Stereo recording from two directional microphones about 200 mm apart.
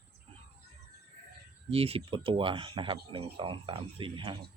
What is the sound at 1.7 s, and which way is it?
A man's voice, 30° right (ahead or behind).